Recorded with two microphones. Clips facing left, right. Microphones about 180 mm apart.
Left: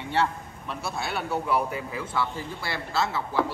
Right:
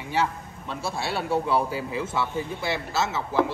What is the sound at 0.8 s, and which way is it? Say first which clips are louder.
Speech: right 2 dB; 30° right (ahead or behind).